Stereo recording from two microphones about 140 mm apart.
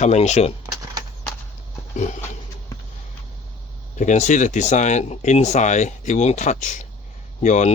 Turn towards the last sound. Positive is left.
turn(degrees=55)  # may be behind; listen again after turning